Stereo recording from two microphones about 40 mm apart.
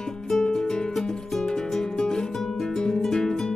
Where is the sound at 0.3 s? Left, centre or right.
Centre.